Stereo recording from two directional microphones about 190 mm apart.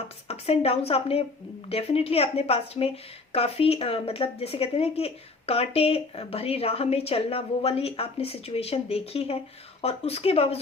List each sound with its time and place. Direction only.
0.3 s speech: 30° left (ahead or behind)